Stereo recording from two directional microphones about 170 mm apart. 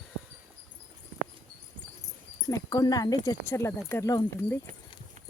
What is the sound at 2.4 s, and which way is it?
Speech, 20° left (ahead or behind).